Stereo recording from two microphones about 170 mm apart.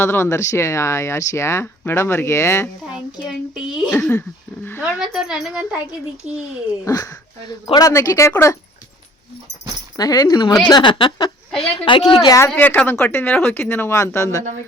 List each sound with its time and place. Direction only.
0.0 s speech: 15° left (ahead or behind)
2.9 s a child's voice: 5° right (ahead or behind)
6.8 s speech: 20° left (ahead or behind)
10.0 s a woman's voice: 20° left (ahead or behind)
12.5 s speech: 10° left (ahead or behind)